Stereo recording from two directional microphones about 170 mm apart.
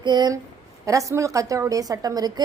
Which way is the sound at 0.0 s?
25° right (ahead or behind).